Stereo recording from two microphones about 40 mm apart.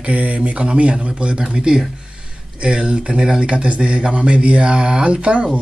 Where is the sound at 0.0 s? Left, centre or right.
Right.